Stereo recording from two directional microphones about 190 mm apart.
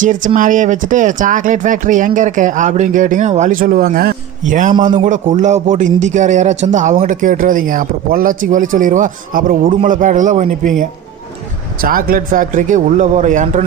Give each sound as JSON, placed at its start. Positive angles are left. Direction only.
{"t": 0.0, "sound": "a man's voice", "side_deg": -45}
{"t": 11.8, "sound": "a man's voice", "side_deg": -50}